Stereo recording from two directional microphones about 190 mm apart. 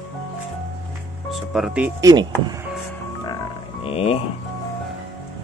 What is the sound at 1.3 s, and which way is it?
Music, centre (ahead or behind).